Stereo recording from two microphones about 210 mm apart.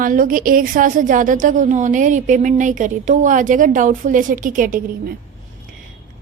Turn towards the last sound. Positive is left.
turn(degrees=-40)  # may be behind; listen again after turning